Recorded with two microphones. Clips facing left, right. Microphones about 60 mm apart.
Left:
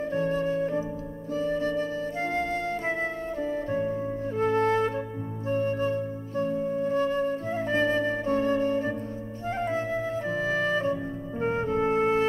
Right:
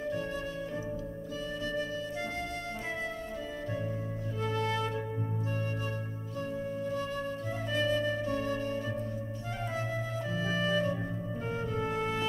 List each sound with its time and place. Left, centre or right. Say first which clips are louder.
0.1 s music: left 9 dB; left
4.4 s music: left 9 dB; left
5.5 s flute: left 10 dB; left
9.6 s music: left 7 dB; left